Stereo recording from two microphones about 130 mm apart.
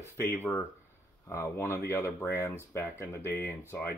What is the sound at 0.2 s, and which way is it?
Speech, 15° left (ahead or behind).